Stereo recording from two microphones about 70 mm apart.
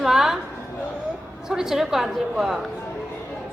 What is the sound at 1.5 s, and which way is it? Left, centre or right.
A woman's voice, centre.